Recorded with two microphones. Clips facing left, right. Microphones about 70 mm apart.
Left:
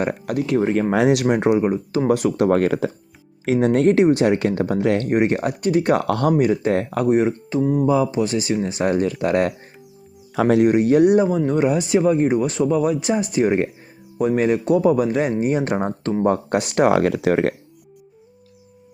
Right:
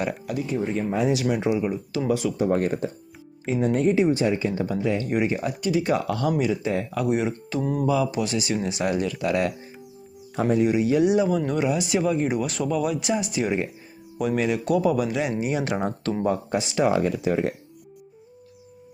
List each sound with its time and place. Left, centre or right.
0.0 s speech: left
2.0 s speech: left
3.4 s speech: left
5.0 s speech: left
7.6 s speech: centre
7.9 s speech: left
10.4 s speech: left
11.3 s speech: left
11.6 s speech: left
16.5 s speech: left